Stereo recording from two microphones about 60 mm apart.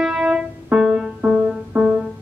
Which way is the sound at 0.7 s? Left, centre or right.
Centre.